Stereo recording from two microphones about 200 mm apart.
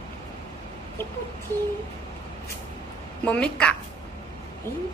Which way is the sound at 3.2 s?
5° left (ahead or behind).